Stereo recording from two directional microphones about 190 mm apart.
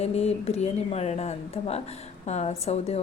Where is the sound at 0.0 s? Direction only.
35° left (ahead or behind).